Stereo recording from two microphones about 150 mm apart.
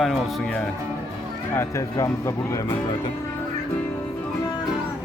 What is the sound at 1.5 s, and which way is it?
Speech, 20° left (ahead or behind).